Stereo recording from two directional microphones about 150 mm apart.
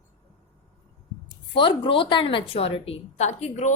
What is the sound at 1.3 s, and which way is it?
A woman's voice, 35° left (ahead or behind).